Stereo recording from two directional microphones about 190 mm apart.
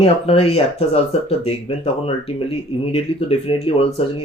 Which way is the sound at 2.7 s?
30° left (ahead or behind).